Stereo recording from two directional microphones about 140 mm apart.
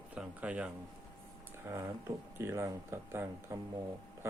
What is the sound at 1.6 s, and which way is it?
Speech, 20° right (ahead or behind).